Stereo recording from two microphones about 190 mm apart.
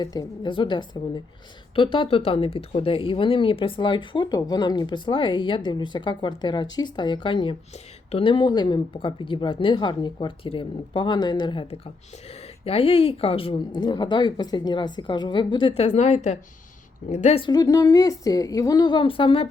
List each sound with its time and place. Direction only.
0.0 s speech: 20° left (ahead or behind)